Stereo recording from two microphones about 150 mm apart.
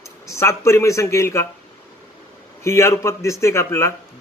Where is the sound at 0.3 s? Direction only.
20° left (ahead or behind).